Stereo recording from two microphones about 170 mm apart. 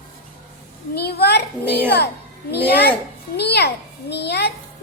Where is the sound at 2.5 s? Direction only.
70° left (ahead or behind).